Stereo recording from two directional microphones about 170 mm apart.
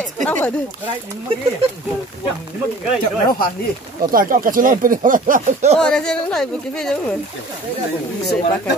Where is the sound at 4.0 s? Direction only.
55° right (ahead or behind).